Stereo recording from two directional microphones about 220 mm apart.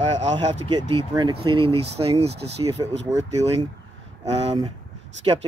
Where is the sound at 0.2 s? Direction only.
20° right (ahead or behind).